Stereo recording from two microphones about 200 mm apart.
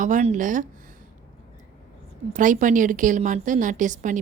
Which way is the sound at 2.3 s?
40° right (ahead or behind).